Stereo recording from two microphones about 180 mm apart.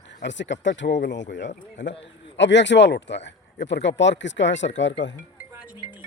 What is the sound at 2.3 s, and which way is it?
Speech, 80° left.